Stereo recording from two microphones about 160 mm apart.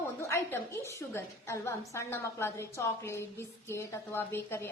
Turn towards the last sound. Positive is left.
turn(degrees=15)  # may be behind; listen again after turning